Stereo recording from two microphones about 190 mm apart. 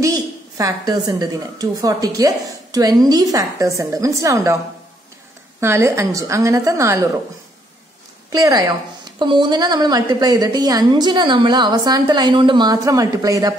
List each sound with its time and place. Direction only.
0.0 s a woman's voice: 15° right (ahead or behind)
5.6 s a woman's voice: 15° right (ahead or behind)
8.3 s a woman's voice: 20° right (ahead or behind)